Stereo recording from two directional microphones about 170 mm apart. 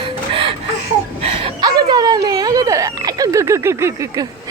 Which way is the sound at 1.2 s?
35° right (ahead or behind).